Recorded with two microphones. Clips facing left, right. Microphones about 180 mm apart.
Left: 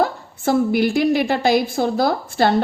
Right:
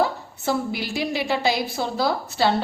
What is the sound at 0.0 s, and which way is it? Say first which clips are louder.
A woman's voice: left 3 dB; 50° left (ahead or behind).